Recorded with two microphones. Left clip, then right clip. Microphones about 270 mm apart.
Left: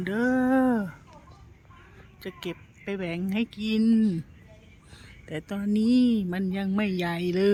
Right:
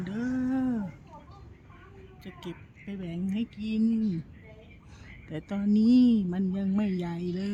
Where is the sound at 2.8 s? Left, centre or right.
Centre.